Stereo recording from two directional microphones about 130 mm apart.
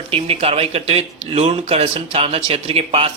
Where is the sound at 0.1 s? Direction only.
50° right (ahead or behind).